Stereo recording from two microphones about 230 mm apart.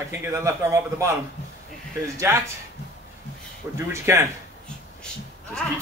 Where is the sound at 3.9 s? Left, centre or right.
Centre.